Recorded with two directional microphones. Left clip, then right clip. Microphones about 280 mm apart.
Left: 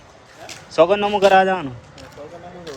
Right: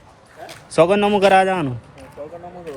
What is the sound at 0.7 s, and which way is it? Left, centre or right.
Speech, right.